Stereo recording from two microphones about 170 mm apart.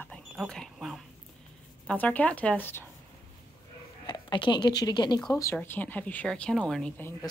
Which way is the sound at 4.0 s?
25° left (ahead or behind).